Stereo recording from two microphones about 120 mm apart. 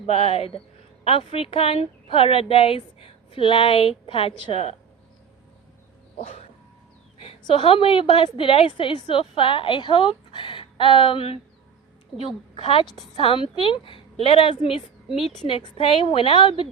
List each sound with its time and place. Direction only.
0.0 s a woman's voice: 55° left (ahead or behind)
6.1 s dog: 55° left (ahead or behind)
7.2 s a woman's voice: 50° left (ahead or behind)
12.5 s a woman's voice: 45° left (ahead or behind)